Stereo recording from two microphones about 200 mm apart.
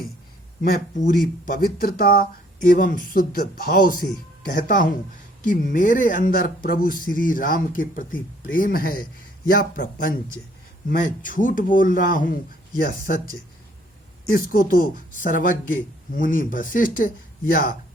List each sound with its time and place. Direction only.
0.6 s speech: 45° left (ahead or behind)
14.3 s speech: 45° left (ahead or behind)